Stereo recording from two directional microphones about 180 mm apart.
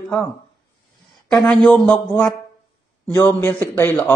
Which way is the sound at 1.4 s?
5° left (ahead or behind).